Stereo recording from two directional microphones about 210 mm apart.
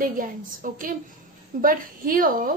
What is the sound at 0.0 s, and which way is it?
A woman's voice, 40° right (ahead or behind).